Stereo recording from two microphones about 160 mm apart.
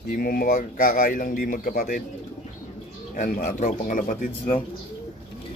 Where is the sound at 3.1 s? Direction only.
55° left (ahead or behind).